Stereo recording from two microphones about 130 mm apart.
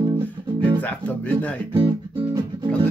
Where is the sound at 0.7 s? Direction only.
10° left (ahead or behind).